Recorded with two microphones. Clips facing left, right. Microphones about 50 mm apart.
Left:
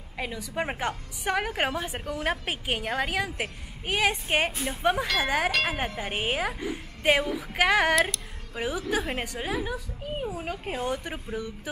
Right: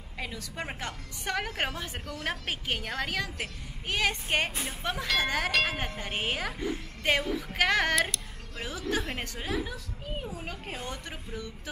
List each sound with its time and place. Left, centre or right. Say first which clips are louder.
0.2 s a woman's voice: left 6 dB; centre
5.0 s speech: left 3 dB; centre
5.8 s a woman's voice: left 3 dB; centre
8.5 s a woman's voice: left 4 dB; centre